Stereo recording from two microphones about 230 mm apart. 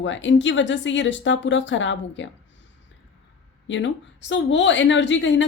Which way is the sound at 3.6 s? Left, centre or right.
Left.